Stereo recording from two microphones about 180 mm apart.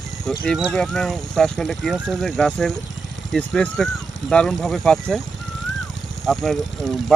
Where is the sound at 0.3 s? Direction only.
Centre (ahead or behind).